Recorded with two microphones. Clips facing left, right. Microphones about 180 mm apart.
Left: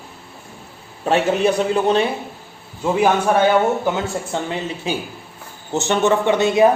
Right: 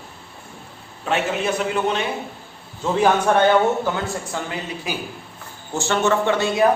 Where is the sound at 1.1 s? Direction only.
35° left (ahead or behind).